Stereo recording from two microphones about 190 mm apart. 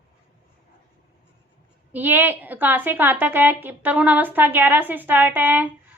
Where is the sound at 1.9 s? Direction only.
10° right (ahead or behind).